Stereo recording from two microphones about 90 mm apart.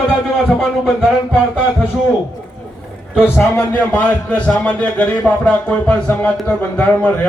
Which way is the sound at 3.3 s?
25° left (ahead or behind).